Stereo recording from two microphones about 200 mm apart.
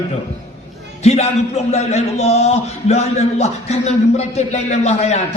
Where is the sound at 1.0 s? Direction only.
30° left (ahead or behind).